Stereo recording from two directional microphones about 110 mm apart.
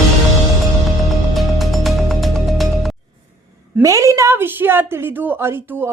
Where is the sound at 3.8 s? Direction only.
30° right (ahead or behind).